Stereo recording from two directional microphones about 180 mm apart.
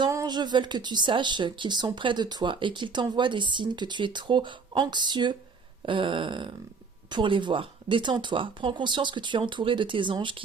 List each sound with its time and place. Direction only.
0.0 s a woman's voice: 20° right (ahead or behind)